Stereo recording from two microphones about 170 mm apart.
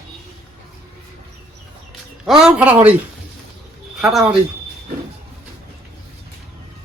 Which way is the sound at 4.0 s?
Centre (ahead or behind).